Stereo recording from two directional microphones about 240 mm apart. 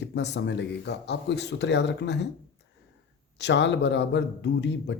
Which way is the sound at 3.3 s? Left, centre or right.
Left.